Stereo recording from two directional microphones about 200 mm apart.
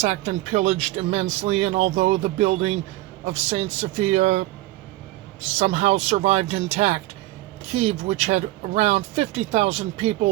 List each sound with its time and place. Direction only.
0.0 s speech: 35° right (ahead or behind)
5.5 s speech: 30° right (ahead or behind)